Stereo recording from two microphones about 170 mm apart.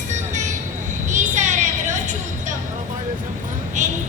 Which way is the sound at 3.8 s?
45° right (ahead or behind).